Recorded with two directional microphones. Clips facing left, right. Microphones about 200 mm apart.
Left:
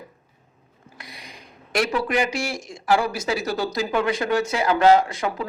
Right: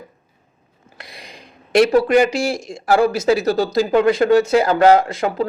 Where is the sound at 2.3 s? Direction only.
25° right (ahead or behind).